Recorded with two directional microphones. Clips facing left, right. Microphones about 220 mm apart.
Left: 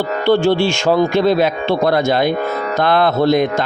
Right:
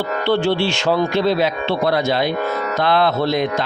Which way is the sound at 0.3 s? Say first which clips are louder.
Left 5 dB; 45° left (ahead or behind).